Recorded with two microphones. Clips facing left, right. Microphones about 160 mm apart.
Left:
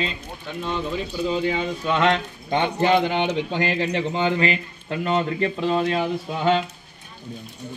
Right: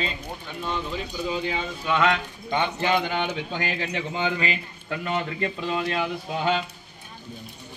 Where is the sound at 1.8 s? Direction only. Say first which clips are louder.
Left 2 dB; 30° left (ahead or behind).